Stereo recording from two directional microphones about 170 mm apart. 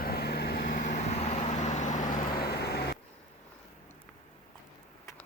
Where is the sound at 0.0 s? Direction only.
65° left (ahead or behind); by 2.0 s 45° left (ahead or behind).